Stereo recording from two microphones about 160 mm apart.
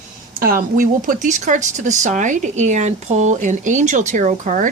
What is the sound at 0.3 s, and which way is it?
Speech, 60° right (ahead or behind).